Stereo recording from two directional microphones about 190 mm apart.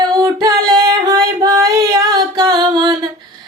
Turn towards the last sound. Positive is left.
turn(degrees=-20)  # may be behind; listen again after turning